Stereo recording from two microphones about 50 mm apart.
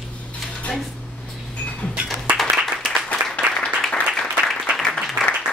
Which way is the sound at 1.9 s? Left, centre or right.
Right.